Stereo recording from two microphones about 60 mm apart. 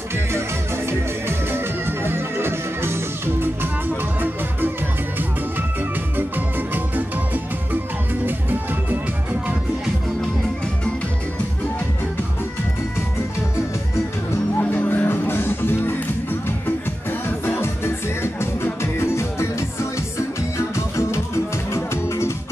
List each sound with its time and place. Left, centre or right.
1.5 s music: right
14.7 s music: left
17.5 s music: left
20.5 s music: left